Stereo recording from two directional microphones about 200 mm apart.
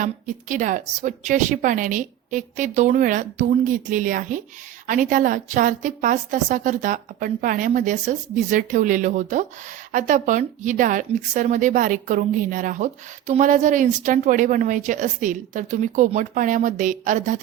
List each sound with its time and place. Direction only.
0.0 s speech: 40° right (ahead or behind)